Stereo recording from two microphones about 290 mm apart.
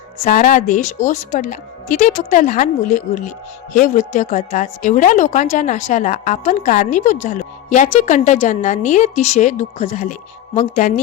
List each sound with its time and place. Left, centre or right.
0.3 s speech: left